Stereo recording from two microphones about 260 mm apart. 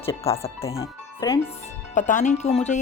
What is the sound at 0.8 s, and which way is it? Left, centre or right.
Speech, centre.